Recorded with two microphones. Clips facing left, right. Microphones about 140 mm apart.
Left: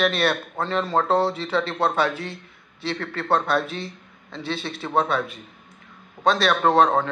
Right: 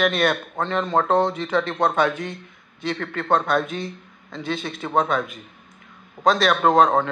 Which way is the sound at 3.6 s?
30° left (ahead or behind).